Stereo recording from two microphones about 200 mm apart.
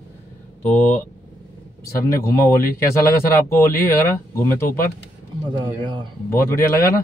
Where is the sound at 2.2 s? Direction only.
10° left (ahead or behind).